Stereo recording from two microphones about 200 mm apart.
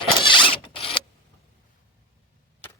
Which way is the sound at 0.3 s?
25° left (ahead or behind).